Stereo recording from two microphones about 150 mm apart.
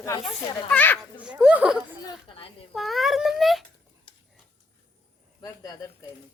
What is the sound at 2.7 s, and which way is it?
Speech, centre (ahead or behind).